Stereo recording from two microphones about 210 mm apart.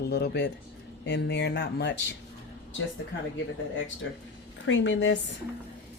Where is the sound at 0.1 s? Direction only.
55° left (ahead or behind).